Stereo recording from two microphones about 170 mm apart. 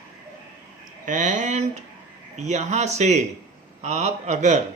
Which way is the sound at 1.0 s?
50° right (ahead or behind).